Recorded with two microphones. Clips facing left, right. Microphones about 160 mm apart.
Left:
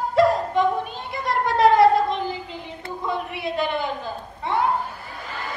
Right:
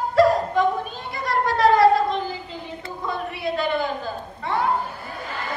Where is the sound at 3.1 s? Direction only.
20° left (ahead or behind).